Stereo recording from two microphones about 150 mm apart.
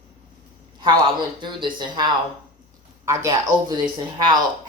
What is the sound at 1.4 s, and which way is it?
Speech, 30° right (ahead or behind).